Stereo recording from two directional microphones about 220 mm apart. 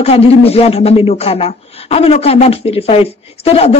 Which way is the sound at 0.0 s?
25° left (ahead or behind).